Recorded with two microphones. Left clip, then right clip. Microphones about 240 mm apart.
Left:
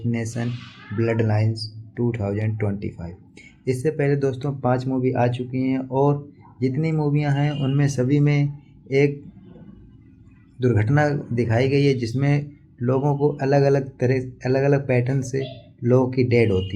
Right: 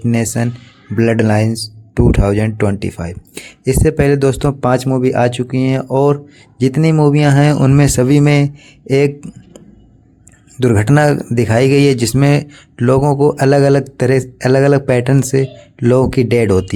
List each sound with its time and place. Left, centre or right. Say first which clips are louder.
0.1 s speech: right 11 dB; right
10.6 s speech: right 9 dB; right